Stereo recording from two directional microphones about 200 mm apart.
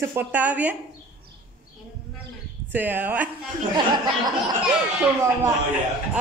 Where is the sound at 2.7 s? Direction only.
10° right (ahead or behind).